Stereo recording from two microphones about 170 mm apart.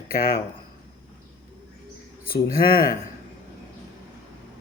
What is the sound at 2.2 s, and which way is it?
Speech, 60° left (ahead or behind).